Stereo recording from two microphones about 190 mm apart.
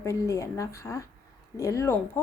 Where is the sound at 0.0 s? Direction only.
15° left (ahead or behind).